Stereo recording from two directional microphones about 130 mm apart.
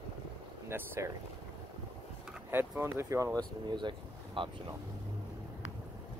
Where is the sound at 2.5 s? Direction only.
15° right (ahead or behind); by 4.5 s 40° right (ahead or behind).